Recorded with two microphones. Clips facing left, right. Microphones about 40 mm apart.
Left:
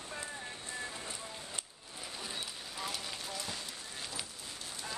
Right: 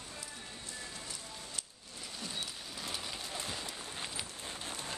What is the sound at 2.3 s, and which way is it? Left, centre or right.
Rain on surface, centre.